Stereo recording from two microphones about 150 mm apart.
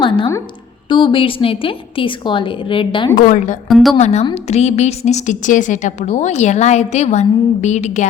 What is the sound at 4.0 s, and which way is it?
A woman's voice, 45° left (ahead or behind).